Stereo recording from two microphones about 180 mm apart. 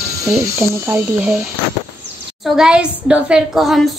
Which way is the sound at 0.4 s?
15° right (ahead or behind).